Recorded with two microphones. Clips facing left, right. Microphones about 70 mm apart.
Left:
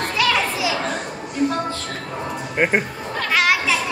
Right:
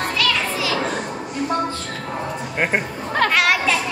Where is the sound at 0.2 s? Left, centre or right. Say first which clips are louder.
Left 4 dB; centre.